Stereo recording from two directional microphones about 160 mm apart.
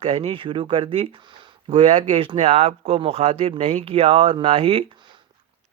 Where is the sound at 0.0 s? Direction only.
40° right (ahead or behind).